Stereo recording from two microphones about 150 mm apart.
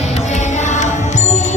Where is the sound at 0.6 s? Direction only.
55° left (ahead or behind).